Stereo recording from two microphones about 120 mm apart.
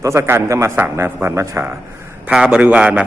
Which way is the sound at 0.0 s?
25° right (ahead or behind).